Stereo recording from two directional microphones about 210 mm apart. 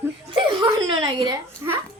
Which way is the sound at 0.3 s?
20° right (ahead or behind).